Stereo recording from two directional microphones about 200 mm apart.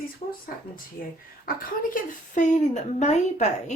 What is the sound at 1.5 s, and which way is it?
A woman's voice, 45° left (ahead or behind).